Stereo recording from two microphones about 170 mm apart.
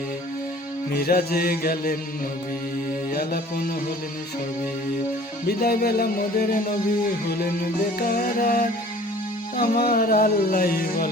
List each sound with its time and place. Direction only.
0.9 s music: 65° left (ahead or behind)
3.1 s music: 60° left (ahead or behind)
5.5 s music: 65° left (ahead or behind)
7.9 s music: 60° left (ahead or behind)